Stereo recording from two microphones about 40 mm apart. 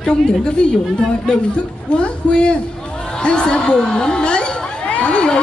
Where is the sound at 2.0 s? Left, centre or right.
Left.